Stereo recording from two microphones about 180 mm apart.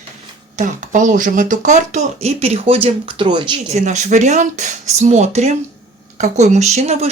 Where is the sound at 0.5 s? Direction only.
45° right (ahead or behind).